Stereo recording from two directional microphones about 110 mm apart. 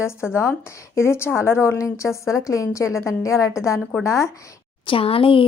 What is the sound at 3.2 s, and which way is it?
A woman's voice, 25° left (ahead or behind).